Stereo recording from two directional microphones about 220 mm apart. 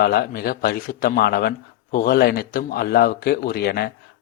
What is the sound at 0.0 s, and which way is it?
Speech, 45° left (ahead or behind).